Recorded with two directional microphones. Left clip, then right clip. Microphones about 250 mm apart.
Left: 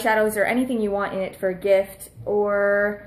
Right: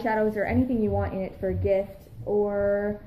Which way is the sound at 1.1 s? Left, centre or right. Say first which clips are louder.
Left 5 dB; left.